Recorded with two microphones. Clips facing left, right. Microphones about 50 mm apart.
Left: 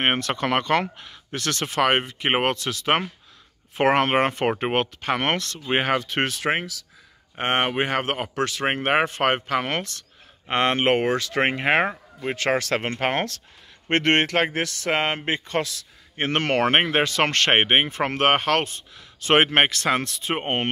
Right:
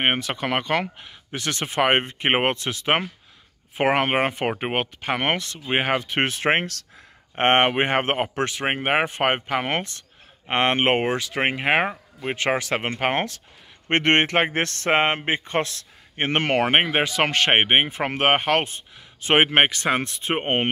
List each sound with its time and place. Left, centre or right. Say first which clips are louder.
0.0 s speech: even; centre; by 3.0 s right
3.7 s speech: left 1 dB; centre; by 8.6 s right
8.6 s speech: left 1 dB; centre
14.6 s speech: right 2 dB; right
14.9 s speech: right 3 dB; right